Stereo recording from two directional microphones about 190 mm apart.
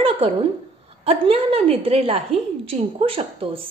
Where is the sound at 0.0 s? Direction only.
30° right (ahead or behind).